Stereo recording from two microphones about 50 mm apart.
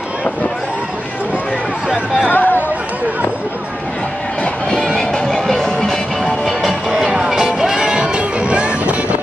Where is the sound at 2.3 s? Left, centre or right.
Left.